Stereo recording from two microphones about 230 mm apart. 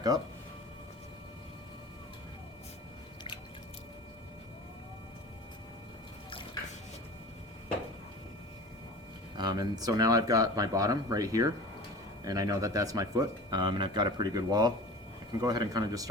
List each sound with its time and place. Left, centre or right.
6.3 s drip: left
9.4 s speech: centre